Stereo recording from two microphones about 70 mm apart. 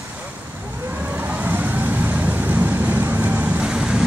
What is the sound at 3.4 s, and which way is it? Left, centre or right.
Vehicle, centre.